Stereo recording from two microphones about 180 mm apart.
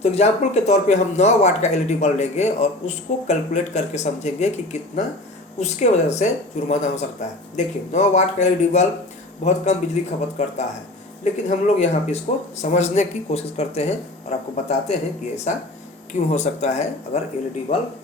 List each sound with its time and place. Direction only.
0.0 s speech: 40° left (ahead or behind)
16.1 s speech: 40° left (ahead or behind)